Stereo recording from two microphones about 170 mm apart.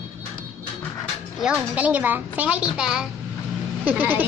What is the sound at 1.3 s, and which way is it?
A child's voice, 5° right (ahead or behind).